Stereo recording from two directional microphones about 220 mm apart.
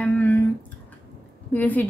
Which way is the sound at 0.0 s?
5° left (ahead or behind).